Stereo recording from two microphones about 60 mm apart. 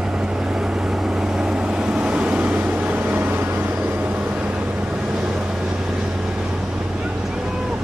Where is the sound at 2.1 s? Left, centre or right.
Centre.